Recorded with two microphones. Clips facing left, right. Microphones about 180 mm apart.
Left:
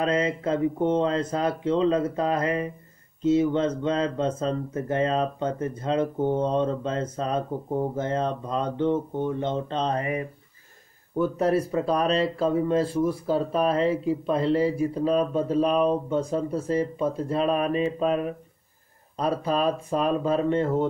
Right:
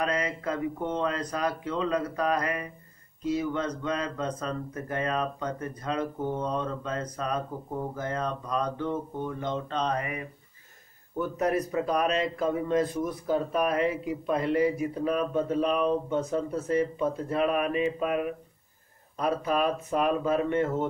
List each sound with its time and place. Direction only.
0.0 s speech: 25° left (ahead or behind)
11.3 s speech: 30° left (ahead or behind)